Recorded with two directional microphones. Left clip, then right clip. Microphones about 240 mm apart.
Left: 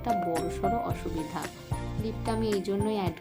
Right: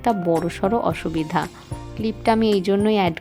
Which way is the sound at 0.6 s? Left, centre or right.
Right.